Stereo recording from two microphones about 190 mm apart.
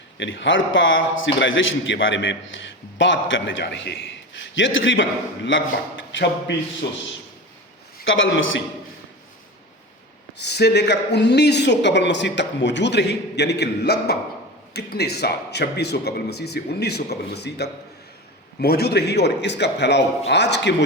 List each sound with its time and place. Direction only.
0.2 s a man's voice: 75° left (ahead or behind)
4.4 s a man's voice: 75° left (ahead or behind)
8.0 s a man's voice: 90° left
10.3 s speech: 60° left (ahead or behind)